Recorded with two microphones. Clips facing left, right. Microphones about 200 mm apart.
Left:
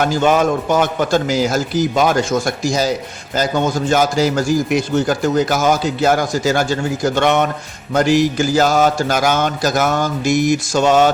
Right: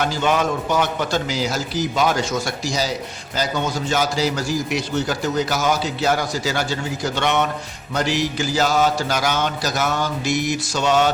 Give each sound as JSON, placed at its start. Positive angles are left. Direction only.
{"t": 0.0, "sound": "a man's voice", "side_deg": 50}